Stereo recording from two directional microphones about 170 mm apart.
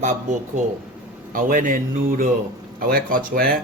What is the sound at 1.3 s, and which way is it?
Speech, 50° right (ahead or behind).